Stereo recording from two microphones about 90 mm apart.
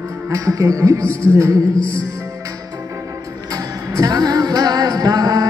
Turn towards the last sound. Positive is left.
turn(degrees=-45)  # may be behind; listen again after turning